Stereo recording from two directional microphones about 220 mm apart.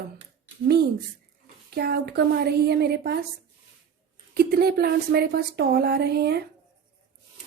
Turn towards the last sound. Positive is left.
turn(degrees=-45)  # may be behind; listen again after turning